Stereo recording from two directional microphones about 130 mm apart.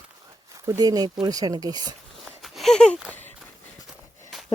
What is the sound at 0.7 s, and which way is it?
Speech, 30° right (ahead or behind).